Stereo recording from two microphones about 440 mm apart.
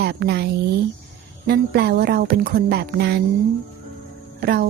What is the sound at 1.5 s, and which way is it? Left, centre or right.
Speech, right.